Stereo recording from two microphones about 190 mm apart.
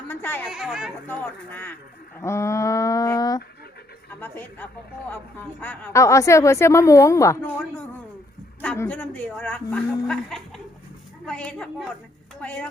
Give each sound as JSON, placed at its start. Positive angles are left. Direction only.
{"t": 0.1, "sound": "speech", "side_deg": 10}
{"t": 0.5, "sound": "a woman's voice", "side_deg": -5}
{"t": 1.0, "sound": "a woman's voice", "side_deg": 10}
{"t": 8.6, "sound": "a woman's voice", "side_deg": 10}